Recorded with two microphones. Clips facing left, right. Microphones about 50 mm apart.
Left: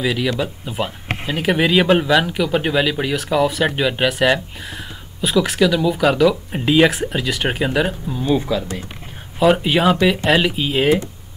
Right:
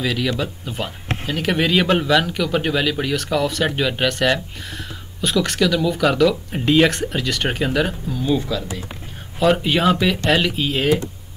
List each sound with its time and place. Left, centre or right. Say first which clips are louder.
0.0 s speech: left 2 dB; centre
8.1 s speech: left 2 dB; left
9.4 s speech: left 2 dB; centre